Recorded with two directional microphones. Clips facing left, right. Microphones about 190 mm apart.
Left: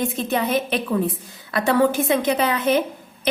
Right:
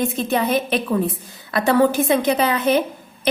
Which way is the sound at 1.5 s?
35° right (ahead or behind).